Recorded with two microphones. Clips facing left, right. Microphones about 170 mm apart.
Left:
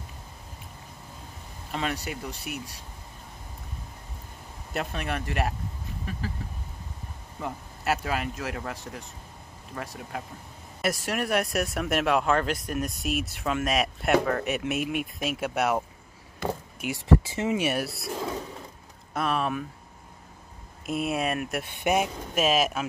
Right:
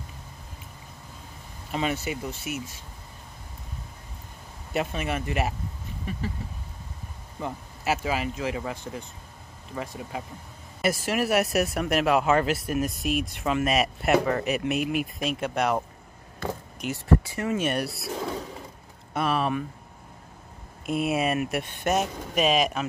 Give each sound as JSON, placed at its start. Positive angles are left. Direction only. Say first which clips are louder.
{"t": 1.7, "sound": "speech", "louder": "right 3 dB", "side_deg": -5}
{"t": 4.7, "sound": "speech", "louder": "right 3 dB", "side_deg": 0}
{"t": 7.3, "sound": "speech", "louder": "right 1 dB", "side_deg": 0}
{"t": 17.1, "sound": "speech", "louder": "left 1 dB", "side_deg": 90}
{"t": 17.4, "sound": "speech", "louder": "even", "side_deg": 15}
{"t": 20.8, "sound": "speech", "louder": "right 2 dB", "side_deg": 0}